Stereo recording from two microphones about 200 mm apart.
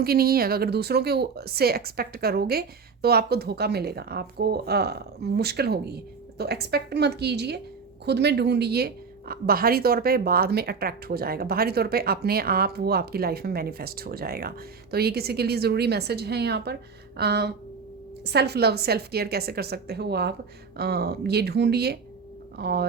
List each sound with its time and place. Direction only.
0.0 s speech: 50° right (ahead or behind)
17.2 s a sound: 55° right (ahead or behind)
18.3 s speech: 55° right (ahead or behind)